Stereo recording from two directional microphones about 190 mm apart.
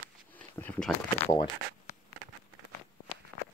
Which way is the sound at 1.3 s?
20° left (ahead or behind).